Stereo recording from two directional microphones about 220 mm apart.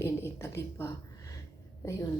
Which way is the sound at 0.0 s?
10° left (ahead or behind).